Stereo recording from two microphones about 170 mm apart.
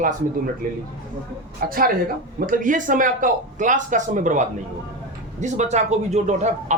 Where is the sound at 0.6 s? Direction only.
55° right (ahead or behind).